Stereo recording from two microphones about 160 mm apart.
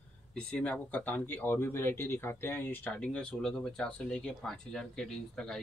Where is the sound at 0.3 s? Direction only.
10° left (ahead or behind).